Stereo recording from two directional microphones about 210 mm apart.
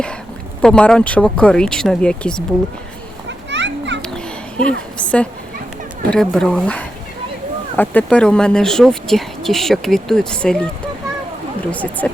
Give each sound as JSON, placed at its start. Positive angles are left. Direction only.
{"t": 0.6, "sound": "speech", "side_deg": 5}
{"t": 3.2, "sound": "children playing", "side_deg": -55}
{"t": 4.0, "sound": "children playing", "side_deg": 5}
{"t": 4.9, "sound": "a woman's voice", "side_deg": 5}
{"t": 11.7, "sound": "speech", "side_deg": 5}